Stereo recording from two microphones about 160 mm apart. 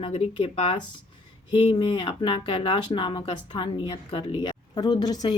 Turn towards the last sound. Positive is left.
turn(degrees=25)  # may be behind; listen again after turning